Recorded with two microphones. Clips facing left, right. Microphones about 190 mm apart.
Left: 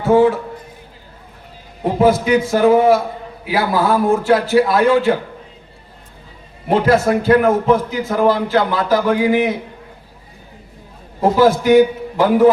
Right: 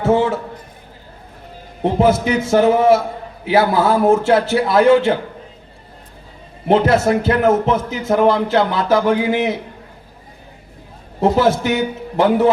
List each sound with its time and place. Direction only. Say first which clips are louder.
0.0 s a man's voice: left 3 dB; 25° right (ahead or behind)
2.0 s a man's voice: left 2 dB; 25° right (ahead or behind)
6.7 s a man's voice: even; 25° right (ahead or behind)
11.2 s a man's voice: left 2 dB; 25° right (ahead or behind)